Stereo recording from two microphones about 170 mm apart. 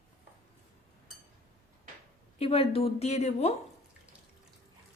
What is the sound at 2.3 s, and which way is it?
Speech, 35° left (ahead or behind).